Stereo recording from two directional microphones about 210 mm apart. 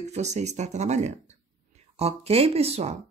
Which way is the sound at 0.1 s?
35° right (ahead or behind).